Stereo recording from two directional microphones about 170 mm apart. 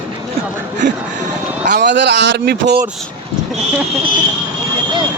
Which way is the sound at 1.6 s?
80° right.